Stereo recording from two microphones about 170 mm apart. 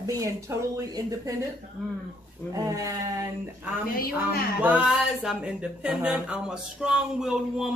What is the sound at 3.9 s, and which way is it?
Speech, 60° left (ahead or behind).